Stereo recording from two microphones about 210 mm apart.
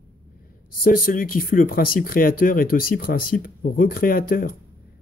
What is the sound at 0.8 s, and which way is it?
Speech, 45° left (ahead or behind).